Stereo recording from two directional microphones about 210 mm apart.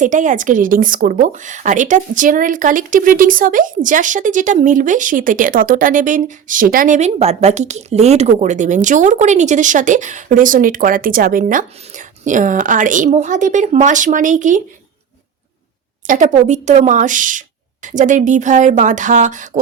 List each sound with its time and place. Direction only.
0.0 s a woman's voice: 35° right (ahead or behind)
16.0 s a woman's voice: 35° right (ahead or behind)